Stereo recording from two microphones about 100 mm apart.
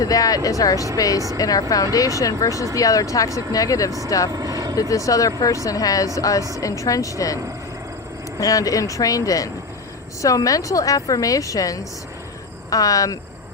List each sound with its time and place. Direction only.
0.0 s a woman's voice: 35° left (ahead or behind)
4.3 s vehicle: 40° right (ahead or behind)
4.8 s a woman's voice: 35° left (ahead or behind)
8.4 s a woman's voice: 35° left (ahead or behind)